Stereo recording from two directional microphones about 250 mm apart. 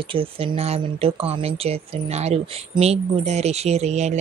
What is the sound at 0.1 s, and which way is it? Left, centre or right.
Speech, right.